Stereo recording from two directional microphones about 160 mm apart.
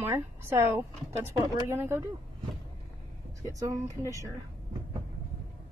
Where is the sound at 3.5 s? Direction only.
20° right (ahead or behind).